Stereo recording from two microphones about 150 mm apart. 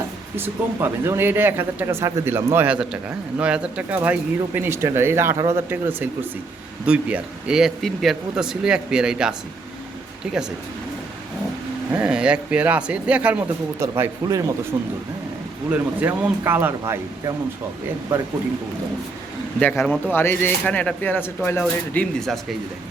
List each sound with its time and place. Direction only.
0.3 s speech: 15° right (ahead or behind)
11.9 s speech: 5° right (ahead or behind)
13.7 s speech: 20° right (ahead or behind)
15.7 s speech: 10° right (ahead or behind)
19.7 s speech: centre (ahead or behind)
20.1 s speech: 15° left (ahead or behind)